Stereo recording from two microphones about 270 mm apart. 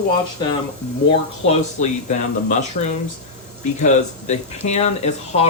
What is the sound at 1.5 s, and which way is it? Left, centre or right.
Speech, left.